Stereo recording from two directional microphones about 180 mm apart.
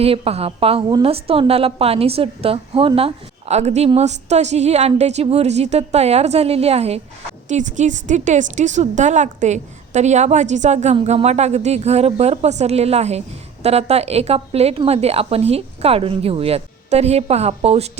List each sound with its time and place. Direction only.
0.0 s speech: 35° right (ahead or behind)